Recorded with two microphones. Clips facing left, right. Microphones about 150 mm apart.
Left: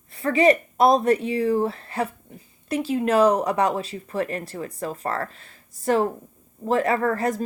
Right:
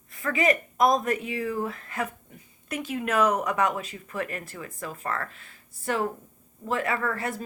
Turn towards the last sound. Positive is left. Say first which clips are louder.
# left 7 dB
turn(degrees=40)  # may be behind; listen again after turning